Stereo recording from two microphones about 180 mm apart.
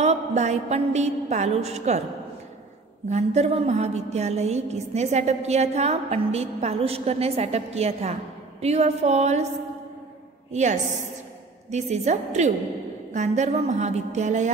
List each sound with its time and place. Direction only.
0.0 s music: 40° right (ahead or behind)
3.1 s music: 40° right (ahead or behind)
10.5 s music: 40° right (ahead or behind)